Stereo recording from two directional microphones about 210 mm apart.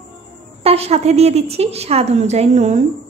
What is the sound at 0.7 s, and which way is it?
A woman's voice, 30° right (ahead or behind).